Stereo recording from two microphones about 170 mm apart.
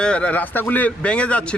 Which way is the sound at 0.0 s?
5° left (ahead or behind).